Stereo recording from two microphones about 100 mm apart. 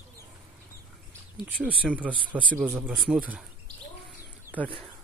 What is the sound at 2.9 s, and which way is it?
Speech, centre (ahead or behind).